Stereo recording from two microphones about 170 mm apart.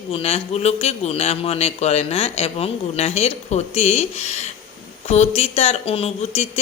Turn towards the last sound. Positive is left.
turn(degrees=40)  # may be behind; listen again after turning